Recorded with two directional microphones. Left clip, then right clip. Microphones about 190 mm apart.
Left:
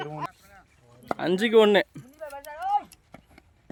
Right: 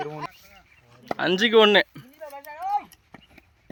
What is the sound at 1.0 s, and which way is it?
Speech, 5° left (ahead or behind).